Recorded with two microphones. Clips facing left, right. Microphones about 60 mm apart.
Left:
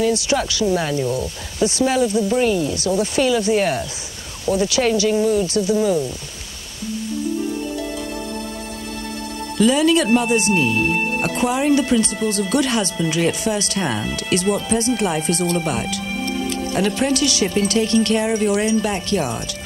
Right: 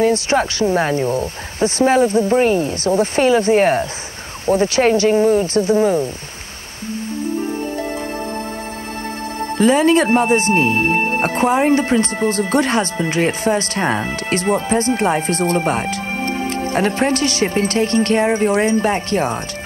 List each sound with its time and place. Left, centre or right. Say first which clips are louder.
0.0 s speech: right 3 dB; right
9.6 s speech: right 2 dB; right